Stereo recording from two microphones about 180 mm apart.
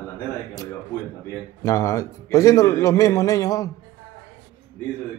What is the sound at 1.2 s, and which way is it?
A man's voice, 15° left (ahead or behind).